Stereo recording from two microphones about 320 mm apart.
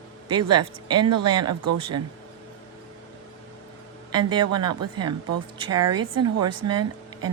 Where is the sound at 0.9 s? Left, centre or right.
Right.